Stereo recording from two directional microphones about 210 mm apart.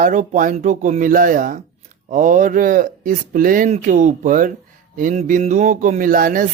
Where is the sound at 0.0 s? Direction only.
40° right (ahead or behind).